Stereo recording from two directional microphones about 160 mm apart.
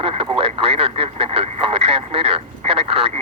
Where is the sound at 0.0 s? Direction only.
35° right (ahead or behind).